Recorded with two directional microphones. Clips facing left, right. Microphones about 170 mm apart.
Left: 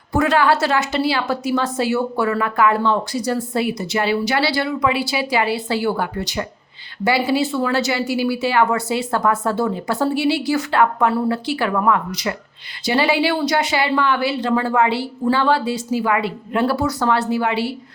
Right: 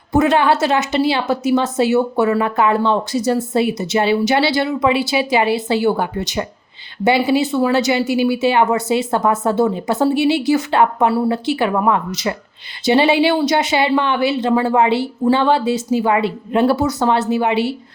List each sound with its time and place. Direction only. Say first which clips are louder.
0.1 s a woman's voice: right 3 dB; 20° right (ahead or behind)